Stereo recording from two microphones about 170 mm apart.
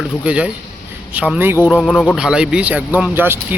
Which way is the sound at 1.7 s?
5° left (ahead or behind).